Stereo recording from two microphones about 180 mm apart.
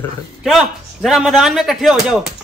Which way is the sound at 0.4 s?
Centre (ahead or behind).